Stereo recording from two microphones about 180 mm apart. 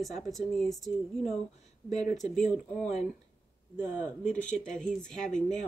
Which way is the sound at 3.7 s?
10° right (ahead or behind).